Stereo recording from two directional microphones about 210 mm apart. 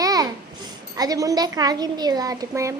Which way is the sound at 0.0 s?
15° right (ahead or behind).